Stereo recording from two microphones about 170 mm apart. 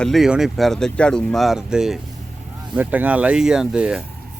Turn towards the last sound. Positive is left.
turn(degrees=-5)  # may be behind; listen again after turning